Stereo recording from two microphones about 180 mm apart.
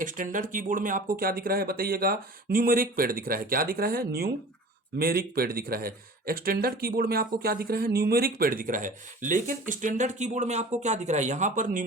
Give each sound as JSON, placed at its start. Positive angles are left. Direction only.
{"t": 0.0, "sound": "speech", "side_deg": -45}